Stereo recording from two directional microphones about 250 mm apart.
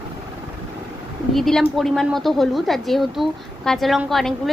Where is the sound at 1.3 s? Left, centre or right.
Centre.